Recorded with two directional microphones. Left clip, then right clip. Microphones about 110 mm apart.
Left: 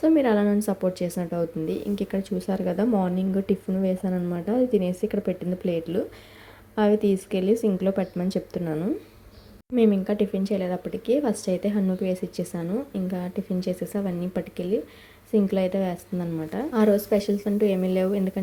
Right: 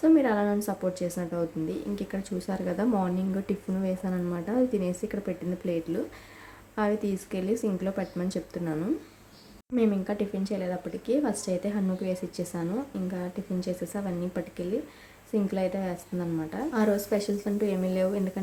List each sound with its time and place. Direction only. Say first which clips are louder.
0.0 s speech: left 2 dB; 40° left (ahead or behind)
5.2 s speech: left 5 dB; 40° left (ahead or behind)